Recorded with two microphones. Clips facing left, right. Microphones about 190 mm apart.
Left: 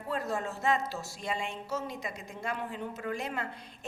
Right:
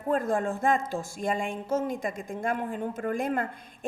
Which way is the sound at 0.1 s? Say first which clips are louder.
Right 7 dB; 50° right (ahead or behind).